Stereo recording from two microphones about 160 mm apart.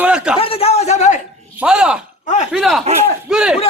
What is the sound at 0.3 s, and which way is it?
Speech, 40° left (ahead or behind).